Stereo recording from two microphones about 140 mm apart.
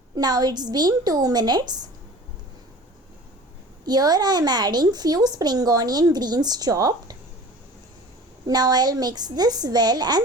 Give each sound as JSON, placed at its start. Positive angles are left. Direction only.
{"t": 0.2, "sound": "speech", "side_deg": -30}
{"t": 3.8, "sound": "speech", "side_deg": -30}
{"t": 8.4, "sound": "speech", "side_deg": -30}